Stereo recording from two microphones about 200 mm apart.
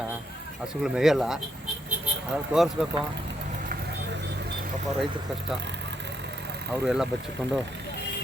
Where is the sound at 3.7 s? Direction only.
60° right (ahead or behind).